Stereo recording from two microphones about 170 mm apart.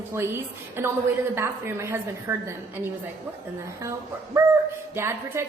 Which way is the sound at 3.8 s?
15° right (ahead or behind).